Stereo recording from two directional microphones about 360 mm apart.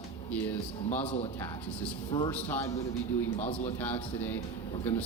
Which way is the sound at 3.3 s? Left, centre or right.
Centre.